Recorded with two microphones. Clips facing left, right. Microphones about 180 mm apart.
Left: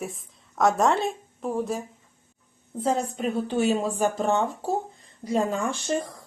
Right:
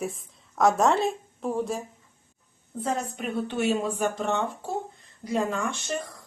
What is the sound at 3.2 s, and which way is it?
Speech, 35° left (ahead or behind).